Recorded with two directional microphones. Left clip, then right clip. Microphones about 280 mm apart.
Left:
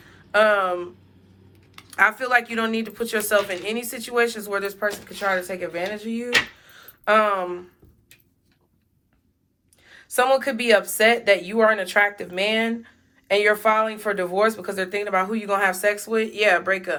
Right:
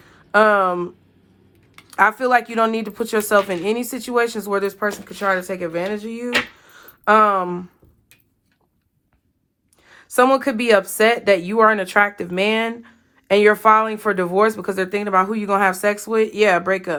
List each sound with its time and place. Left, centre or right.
0.0 s a sound: right
2.0 s speech: centre
9.9 s speech: right